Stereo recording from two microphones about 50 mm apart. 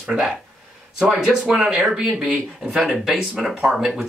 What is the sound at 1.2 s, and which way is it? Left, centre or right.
Speech, centre.